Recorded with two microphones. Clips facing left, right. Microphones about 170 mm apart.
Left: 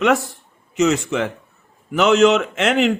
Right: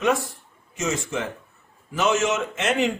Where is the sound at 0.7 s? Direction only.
75° left (ahead or behind).